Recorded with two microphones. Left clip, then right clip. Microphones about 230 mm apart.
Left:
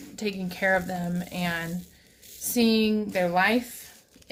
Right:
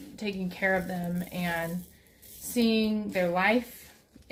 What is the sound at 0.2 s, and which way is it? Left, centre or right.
Speech, left.